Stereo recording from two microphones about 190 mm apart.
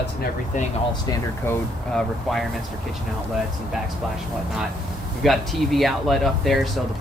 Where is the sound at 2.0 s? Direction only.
Centre (ahead or behind).